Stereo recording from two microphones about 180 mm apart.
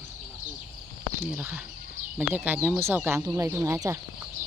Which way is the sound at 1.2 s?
10° right (ahead or behind).